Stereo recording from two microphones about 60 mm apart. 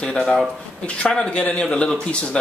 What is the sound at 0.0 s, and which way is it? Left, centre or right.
Speech, centre.